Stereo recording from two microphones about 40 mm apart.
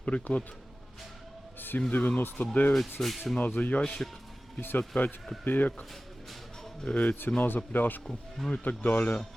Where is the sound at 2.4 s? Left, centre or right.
Left.